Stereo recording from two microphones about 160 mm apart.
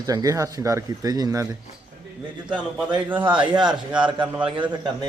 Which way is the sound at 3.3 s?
30° right (ahead or behind).